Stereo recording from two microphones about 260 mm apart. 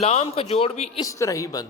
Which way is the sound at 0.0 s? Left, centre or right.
Left.